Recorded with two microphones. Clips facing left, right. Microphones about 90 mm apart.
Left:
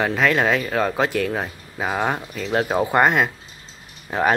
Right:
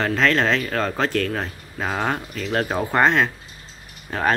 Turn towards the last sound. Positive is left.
turn(degrees=15)  # may be behind; listen again after turning